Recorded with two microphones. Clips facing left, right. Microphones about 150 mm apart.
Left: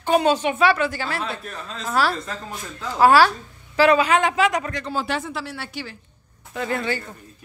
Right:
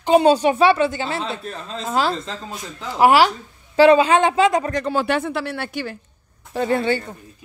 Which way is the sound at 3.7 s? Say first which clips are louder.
Right 4 dB; 30° right (ahead or behind).